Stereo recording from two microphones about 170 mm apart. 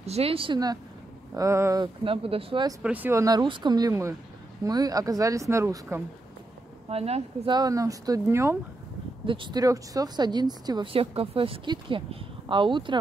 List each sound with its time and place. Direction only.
0.0 s speech: 35° right (ahead or behind); by 1.9 s 20° right (ahead or behind)
2.0 s speech: 35° right (ahead or behind)
2.8 s speech: 10° right (ahead or behind)
6.9 s speech: 35° right (ahead or behind)
7.5 s speech: 20° right (ahead or behind)
9.2 s speech: 30° right (ahead or behind)